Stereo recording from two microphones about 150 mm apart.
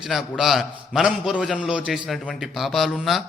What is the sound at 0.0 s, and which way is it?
A man's voice, centre (ahead or behind).